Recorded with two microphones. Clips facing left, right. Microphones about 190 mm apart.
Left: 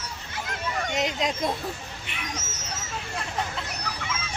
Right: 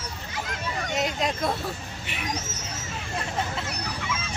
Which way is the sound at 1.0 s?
20° left (ahead or behind).